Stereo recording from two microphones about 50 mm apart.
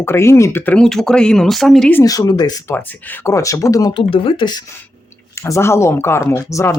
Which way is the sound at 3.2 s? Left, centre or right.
Left.